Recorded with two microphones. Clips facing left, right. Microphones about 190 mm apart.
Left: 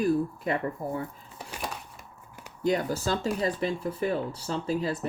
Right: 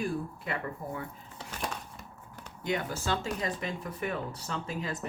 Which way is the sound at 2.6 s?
35° left (ahead or behind).